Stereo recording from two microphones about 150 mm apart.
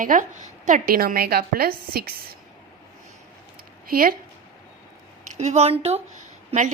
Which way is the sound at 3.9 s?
75° right (ahead or behind).